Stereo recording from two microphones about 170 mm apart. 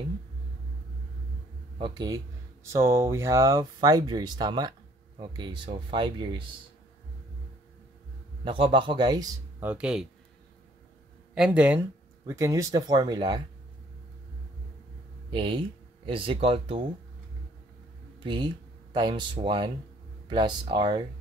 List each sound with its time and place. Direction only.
1.8 s speech: 25° right (ahead or behind)
8.5 s speech: 30° right (ahead or behind)
9.6 s speech: 10° right (ahead or behind)
11.3 s speech: 5° right (ahead or behind); by 13.4 s 25° right (ahead or behind)
15.3 s speech: 30° right (ahead or behind)
18.2 s speech: 25° right (ahead or behind)